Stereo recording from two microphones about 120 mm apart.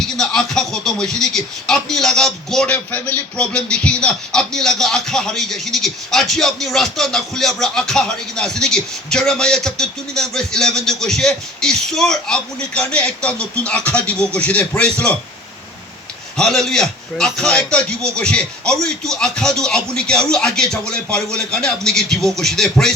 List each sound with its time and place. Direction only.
0.0 s a man's voice: 5° left (ahead or behind)
16.4 s speech: 5° left (ahead or behind)